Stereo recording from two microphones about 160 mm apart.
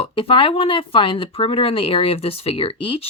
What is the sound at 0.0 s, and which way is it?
Speech, 35° left (ahead or behind).